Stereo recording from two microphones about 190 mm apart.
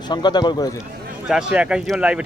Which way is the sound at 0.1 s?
20° left (ahead or behind).